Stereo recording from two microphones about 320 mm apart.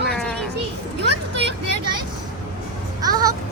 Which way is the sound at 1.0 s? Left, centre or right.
Right.